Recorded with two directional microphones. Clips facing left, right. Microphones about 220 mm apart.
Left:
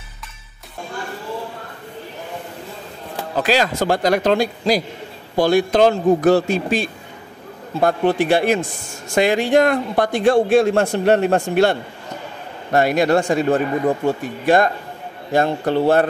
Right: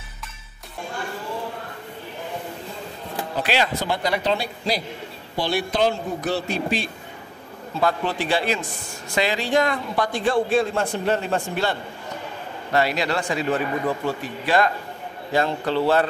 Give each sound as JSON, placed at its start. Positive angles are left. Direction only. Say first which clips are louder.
{"t": 3.4, "sound": "a man's voice", "louder": "left 6 dB", "side_deg": 45}
{"t": 10.5, "sound": "a man's voice", "louder": "left 7 dB", "side_deg": 70}
{"t": 12.7, "sound": "speech", "louder": "left 7 dB", "side_deg": 50}